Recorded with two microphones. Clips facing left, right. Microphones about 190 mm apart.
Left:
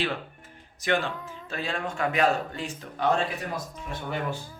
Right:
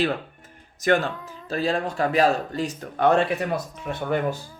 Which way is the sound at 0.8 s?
45° right (ahead or behind).